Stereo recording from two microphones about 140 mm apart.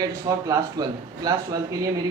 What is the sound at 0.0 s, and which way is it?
Speech, 25° right (ahead or behind).